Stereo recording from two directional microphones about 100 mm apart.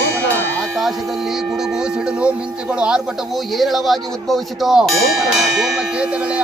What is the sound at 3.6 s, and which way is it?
Speech, centre (ahead or behind).